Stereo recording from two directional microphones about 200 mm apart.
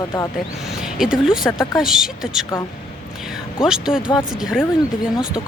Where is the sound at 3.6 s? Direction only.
5° right (ahead or behind).